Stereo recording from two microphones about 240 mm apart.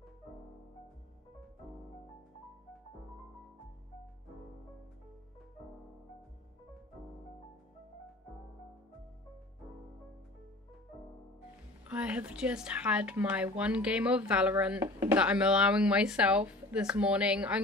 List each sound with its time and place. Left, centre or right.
11.9 s speech: centre